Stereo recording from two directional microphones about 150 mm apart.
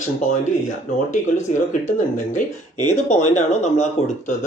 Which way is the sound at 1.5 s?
55° left (ahead or behind).